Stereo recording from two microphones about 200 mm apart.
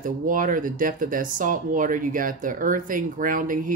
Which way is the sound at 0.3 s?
45° right (ahead or behind).